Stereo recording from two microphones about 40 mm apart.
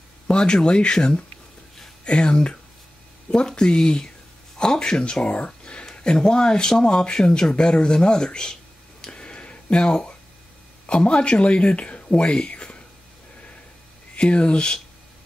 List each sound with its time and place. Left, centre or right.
0.3 s speech: left
6.1 s speech: centre
9.0 s a sound: left
10.9 s speech: left
14.1 s speech: left